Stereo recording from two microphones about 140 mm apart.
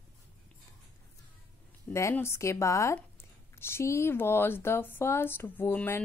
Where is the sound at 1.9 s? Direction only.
20° left (ahead or behind).